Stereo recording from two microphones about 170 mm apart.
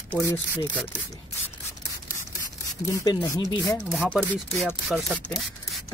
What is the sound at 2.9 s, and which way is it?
Speech, 20° left (ahead or behind).